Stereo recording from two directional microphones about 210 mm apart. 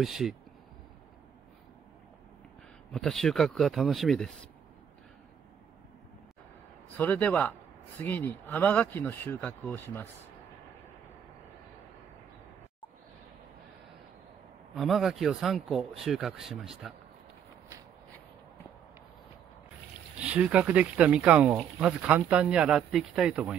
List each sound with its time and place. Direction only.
0.0 s speech: centre (ahead or behind)
2.9 s speech: centre (ahead or behind)
7.0 s speech: 5° left (ahead or behind)
14.7 s speech: centre (ahead or behind)
20.2 s speech: 5° right (ahead or behind)